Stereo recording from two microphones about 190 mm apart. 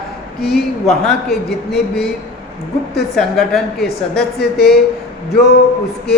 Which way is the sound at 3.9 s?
55° left (ahead or behind).